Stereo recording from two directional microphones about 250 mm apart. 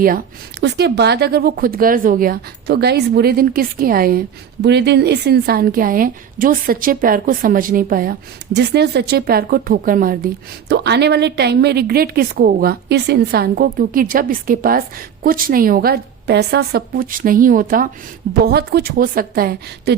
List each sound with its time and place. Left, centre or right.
0.6 s a woman's voice: right